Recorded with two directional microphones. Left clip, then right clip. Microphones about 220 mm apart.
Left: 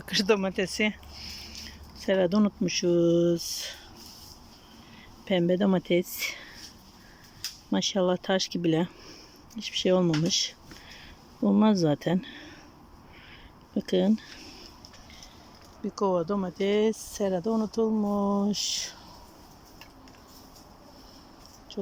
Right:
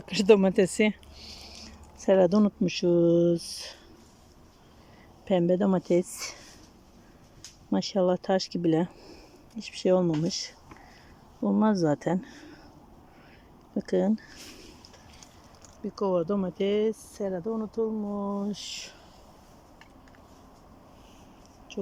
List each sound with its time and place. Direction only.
0.0 s speech: 10° right (ahead or behind)
5.2 s speech: 5° right (ahead or behind)
7.7 s speech: 5° right (ahead or behind)
13.7 s speech: centre (ahead or behind)
15.8 s speech: 5° right (ahead or behind)